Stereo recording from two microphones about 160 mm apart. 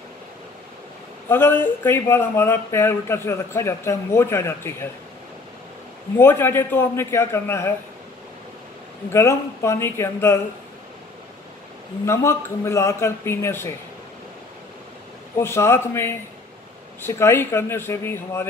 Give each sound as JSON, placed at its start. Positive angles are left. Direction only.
{"t": 1.3, "sound": "speech", "side_deg": 15}
{"t": 6.1, "sound": "speech", "side_deg": 15}
{"t": 9.1, "sound": "speech", "side_deg": 15}
{"t": 12.1, "sound": "speech", "side_deg": 15}
{"t": 15.3, "sound": "speech", "side_deg": 15}